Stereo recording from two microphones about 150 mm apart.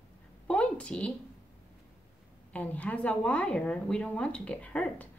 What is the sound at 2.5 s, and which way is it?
A woman's voice, 10° left (ahead or behind).